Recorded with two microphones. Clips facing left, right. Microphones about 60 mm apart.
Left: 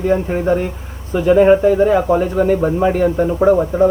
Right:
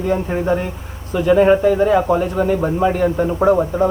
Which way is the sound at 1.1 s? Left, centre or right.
Centre.